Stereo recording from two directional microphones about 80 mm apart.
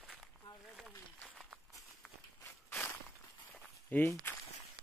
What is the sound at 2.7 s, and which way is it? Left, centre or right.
Walk, left.